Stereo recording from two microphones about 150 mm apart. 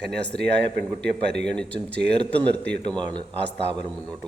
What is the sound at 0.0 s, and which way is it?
A man's voice, 5° left (ahead or behind).